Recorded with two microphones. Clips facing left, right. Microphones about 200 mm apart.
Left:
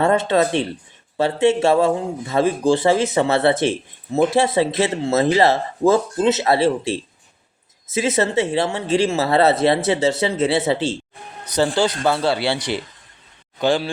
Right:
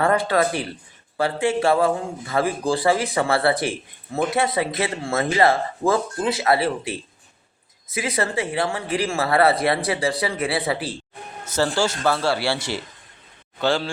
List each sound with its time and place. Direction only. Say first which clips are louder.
0.0 s speech: left 3 dB; 25° left (ahead or behind)